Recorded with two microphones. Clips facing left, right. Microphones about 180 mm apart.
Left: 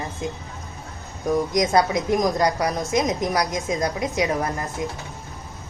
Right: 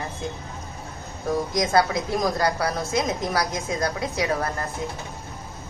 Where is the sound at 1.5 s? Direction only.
20° left (ahead or behind).